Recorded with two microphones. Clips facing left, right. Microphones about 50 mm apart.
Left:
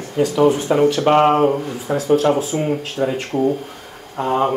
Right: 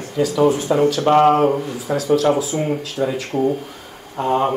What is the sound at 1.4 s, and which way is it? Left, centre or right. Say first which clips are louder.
Speech: even; centre.